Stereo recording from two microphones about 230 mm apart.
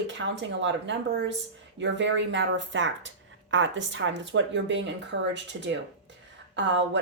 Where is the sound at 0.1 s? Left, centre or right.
Right.